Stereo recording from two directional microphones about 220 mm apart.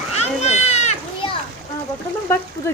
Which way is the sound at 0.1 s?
30° left (ahead or behind).